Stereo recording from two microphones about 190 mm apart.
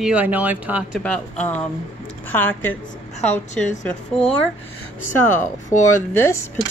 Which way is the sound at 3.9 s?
5° left (ahead or behind).